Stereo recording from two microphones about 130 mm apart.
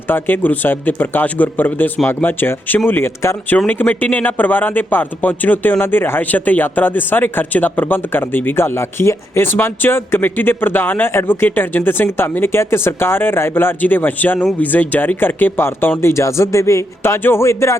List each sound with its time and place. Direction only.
0.1 s a man's voice: 15° left (ahead or behind)